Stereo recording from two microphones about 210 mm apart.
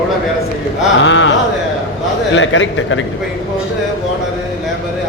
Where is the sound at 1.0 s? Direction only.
60° left (ahead or behind).